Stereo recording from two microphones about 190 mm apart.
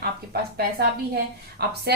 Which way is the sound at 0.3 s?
55° right (ahead or behind).